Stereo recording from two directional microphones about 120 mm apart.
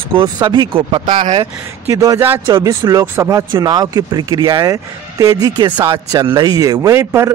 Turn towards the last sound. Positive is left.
turn(degrees=-25)  # may be behind; listen again after turning